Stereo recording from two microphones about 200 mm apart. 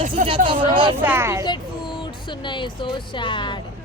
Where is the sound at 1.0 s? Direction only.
10° right (ahead or behind).